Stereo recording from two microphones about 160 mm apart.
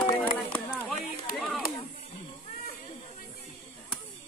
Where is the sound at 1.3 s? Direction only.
Centre (ahead or behind).